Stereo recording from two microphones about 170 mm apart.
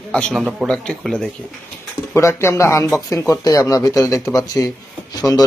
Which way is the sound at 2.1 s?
15° left (ahead or behind).